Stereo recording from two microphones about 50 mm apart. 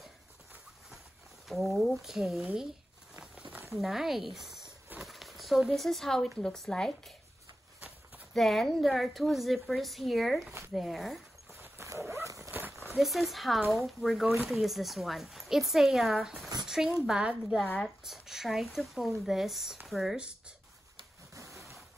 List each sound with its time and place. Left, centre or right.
1.5 s a woman's voice: centre
3.2 s a sound: right
3.7 s a woman's voice: centre
5.0 s a sound: centre
5.7 s a woman's voice: centre
8.4 s a woman's voice: centre
11.8 s dog: right
12.4 s a sound: right
12.9 s a woman's voice: centre
16.6 s a sound: centre
17.2 s a woman's voice: right
17.7 s a woman's voice: centre
20.2 s a woman's voice: centre